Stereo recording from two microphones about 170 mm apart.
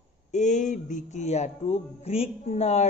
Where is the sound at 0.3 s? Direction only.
45° left (ahead or behind).